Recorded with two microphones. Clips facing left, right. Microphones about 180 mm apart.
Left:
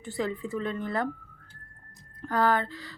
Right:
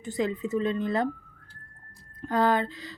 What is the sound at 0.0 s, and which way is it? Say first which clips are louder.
Speech: right 3 dB; 20° right (ahead or behind).